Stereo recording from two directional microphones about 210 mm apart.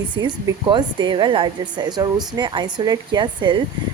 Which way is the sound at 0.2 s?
20° right (ahead or behind).